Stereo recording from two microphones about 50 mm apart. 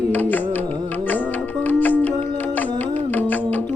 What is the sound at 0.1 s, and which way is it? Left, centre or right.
Carnatic music, left.